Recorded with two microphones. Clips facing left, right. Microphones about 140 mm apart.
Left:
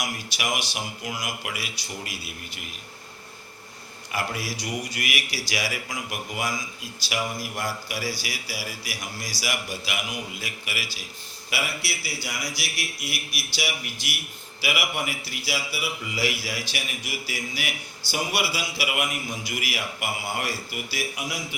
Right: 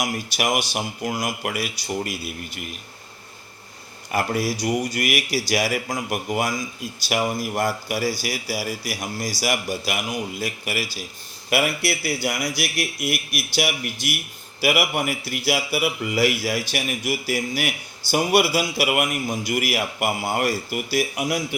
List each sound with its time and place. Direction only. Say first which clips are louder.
0.0 s a man's voice: right 6 dB; 50° right (ahead or behind)
4.1 s a man's voice: right 7 dB; 45° right (ahead or behind)
11.5 s a man's voice: right 9 dB; 55° right (ahead or behind)